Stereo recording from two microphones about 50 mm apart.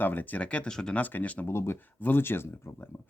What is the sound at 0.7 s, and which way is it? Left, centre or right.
Speech, centre.